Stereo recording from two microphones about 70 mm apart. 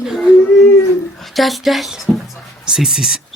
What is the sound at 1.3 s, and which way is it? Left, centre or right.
A child's voice, centre.